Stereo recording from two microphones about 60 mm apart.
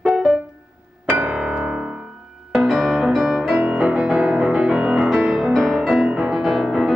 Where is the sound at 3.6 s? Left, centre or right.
Centre.